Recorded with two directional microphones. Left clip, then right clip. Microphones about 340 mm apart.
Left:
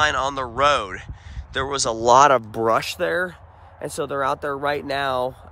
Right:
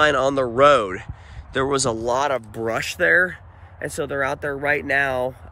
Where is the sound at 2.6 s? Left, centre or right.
Centre.